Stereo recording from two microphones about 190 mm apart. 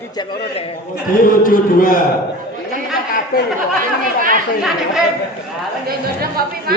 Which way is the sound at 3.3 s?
50° left (ahead or behind).